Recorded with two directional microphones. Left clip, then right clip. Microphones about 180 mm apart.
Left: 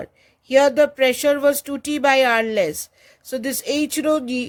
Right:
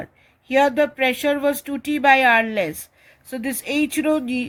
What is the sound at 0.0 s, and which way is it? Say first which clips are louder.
Speech: left 1 dB; 55° left (ahead or behind).